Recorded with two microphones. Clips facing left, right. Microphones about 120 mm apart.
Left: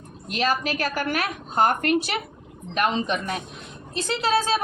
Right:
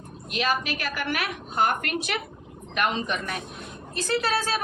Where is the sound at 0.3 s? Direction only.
40° left (ahead or behind).